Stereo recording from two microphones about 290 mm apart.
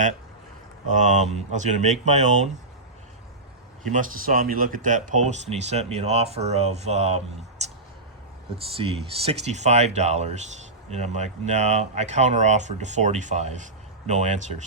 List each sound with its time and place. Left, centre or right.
0.9 s speech: right
3.9 s speech: right
7.6 s a sound: right
8.7 s speech: centre